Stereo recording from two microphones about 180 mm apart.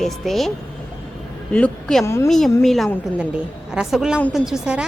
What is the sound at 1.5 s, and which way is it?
Speech, 5° left (ahead or behind).